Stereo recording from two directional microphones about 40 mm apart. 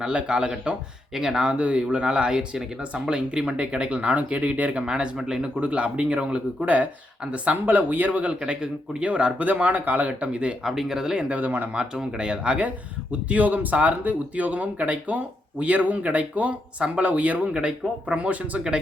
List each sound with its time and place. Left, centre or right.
0.0 s speech: right
1.1 s speech: centre
1.5 s speech: right
4.9 s speech: centre
5.5 s speech: right
7.4 s speech: right
9.5 s speech: right
10.1 s speech: right
10.7 s speech: centre
11.3 s speech: right
11.9 s speech: right
17.4 s speech: right